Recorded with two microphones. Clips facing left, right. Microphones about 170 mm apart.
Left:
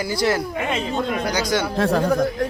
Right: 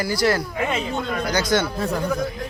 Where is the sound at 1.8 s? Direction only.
90° left.